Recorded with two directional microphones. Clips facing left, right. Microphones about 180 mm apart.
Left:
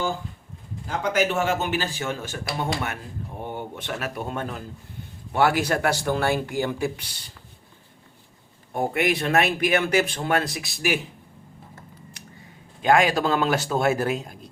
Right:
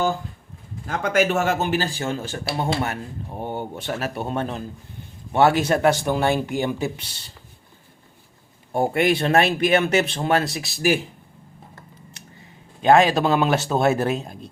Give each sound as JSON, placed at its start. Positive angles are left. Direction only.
{"t": 0.9, "sound": "speech", "side_deg": -55}
{"t": 8.7, "sound": "speech", "side_deg": -30}
{"t": 12.8, "sound": "speech", "side_deg": -25}